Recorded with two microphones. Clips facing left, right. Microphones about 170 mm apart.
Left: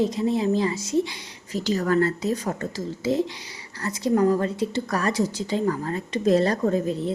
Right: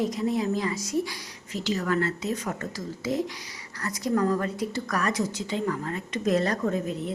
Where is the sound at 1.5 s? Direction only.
40° left (ahead or behind).